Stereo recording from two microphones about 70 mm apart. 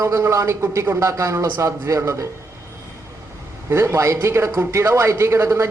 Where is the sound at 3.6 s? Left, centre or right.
Right.